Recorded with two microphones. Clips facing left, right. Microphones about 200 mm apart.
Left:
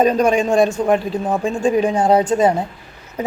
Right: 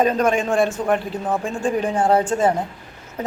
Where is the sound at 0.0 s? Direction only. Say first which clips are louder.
Left 3 dB; 15° left (ahead or behind).